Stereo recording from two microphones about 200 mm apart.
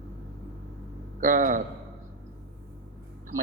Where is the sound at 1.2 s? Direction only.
40° right (ahead or behind).